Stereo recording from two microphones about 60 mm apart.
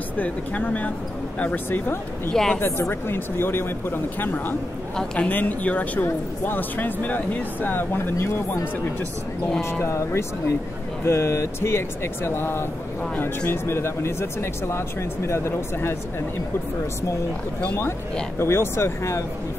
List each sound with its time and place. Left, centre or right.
0.2 s speech: left
2.3 s a man's voice: centre
2.9 s speech: left
4.9 s a man's voice: centre; by 8.4 s left
9.8 s speech: left
18.4 s speech: left